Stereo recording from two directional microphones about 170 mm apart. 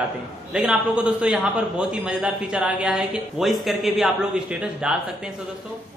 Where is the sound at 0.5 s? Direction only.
5° right (ahead or behind).